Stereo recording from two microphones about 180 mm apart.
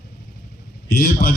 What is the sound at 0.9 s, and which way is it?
Speech, 60° left (ahead or behind).